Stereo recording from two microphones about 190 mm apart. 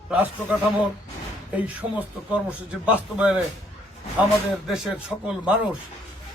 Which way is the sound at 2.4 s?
5° right (ahead or behind).